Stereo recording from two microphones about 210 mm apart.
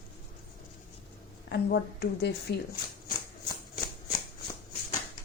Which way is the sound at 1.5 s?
50° left (ahead or behind).